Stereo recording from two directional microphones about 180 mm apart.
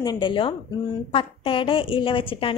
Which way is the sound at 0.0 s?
25° left (ahead or behind).